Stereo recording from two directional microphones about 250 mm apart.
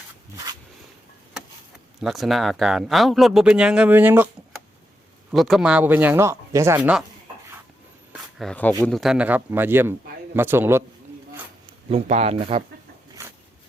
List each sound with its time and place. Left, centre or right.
2.0 s speech: centre
5.3 s speech: centre
8.4 s speech: centre
11.9 s speech: right
13.2 s a sound: centre